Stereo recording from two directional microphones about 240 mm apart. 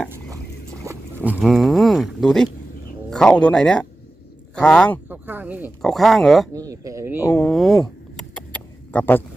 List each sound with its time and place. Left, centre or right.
0.9 s speech: centre
5.0 s speech: centre
6.5 s speech: centre
7.3 s a sound: centre